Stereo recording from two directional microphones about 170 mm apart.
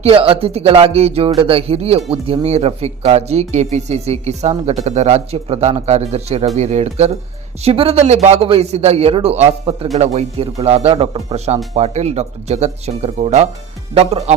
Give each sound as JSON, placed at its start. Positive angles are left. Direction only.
{"t": 0.0, "sound": "a man's voice", "side_deg": -35}